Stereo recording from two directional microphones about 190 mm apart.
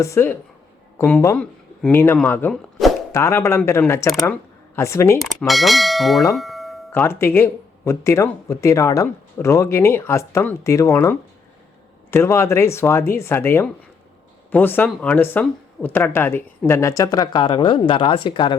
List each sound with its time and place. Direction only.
0.0 s speech: 15° left (ahead or behind)
5.2 s bell: centre (ahead or behind)
6.3 s doorbell: centre (ahead or behind)
6.9 s speech: 10° left (ahead or behind)